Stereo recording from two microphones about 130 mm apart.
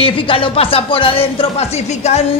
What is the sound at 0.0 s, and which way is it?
Speech, 45° left (ahead or behind).